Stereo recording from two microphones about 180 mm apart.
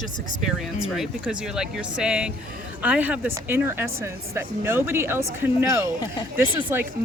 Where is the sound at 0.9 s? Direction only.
5° right (ahead or behind).